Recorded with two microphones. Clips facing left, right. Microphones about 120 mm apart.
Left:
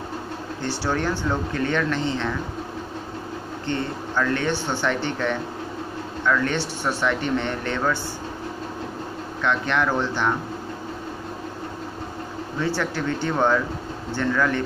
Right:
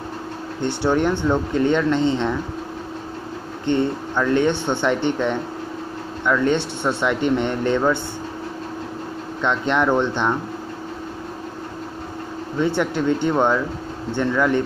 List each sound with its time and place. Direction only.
0.6 s speech: 20° right (ahead or behind)
3.6 s speech: 20° right (ahead or behind)
9.4 s speech: 20° right (ahead or behind)
12.5 s speech: 20° right (ahead or behind)